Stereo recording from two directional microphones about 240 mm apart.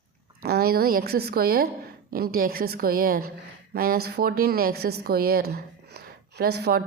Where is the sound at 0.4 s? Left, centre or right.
Right.